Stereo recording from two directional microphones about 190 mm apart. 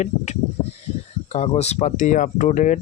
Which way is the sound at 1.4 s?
35° left (ahead or behind).